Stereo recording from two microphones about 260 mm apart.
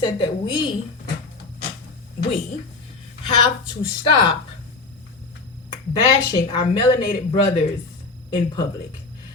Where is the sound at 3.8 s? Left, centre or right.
Centre.